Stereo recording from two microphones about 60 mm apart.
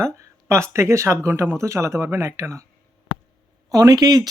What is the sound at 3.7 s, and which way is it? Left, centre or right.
Speech, right.